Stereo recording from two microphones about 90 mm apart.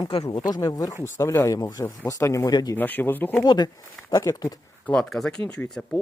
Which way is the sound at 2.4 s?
45° left (ahead or behind).